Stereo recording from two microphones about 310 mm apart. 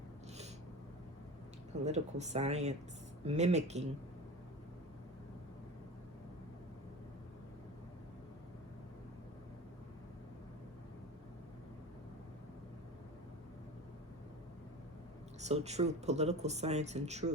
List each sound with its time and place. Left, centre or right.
1.8 s speech: right
15.4 s speech: right